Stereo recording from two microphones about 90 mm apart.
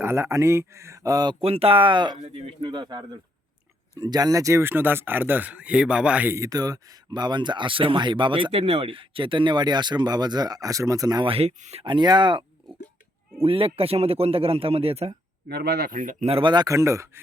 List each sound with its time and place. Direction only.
0.0 s speech: 30° right (ahead or behind); by 1.4 s 45° right (ahead or behind)
1.4 s speech: 90° right; by 3.0 s 60° right (ahead or behind)
3.9 s speech: 45° right (ahead or behind); by 6.3 s 15° right (ahead or behind)
6.3 s speech: 40° right (ahead or behind)
11.2 s speech: 90° right
11.9 s speech: 55° right (ahead or behind)
13.4 s speech: 90° right
16.3 s speech: 65° right (ahead or behind)
16.6 s speech: 35° right (ahead or behind)